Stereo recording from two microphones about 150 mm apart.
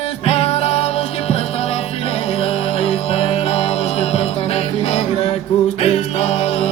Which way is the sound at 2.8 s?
40° left (ahead or behind).